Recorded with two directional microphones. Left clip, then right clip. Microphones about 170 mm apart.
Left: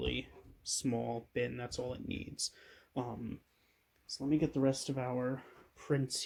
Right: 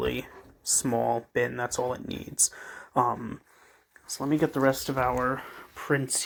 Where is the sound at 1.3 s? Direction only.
40° right (ahead or behind).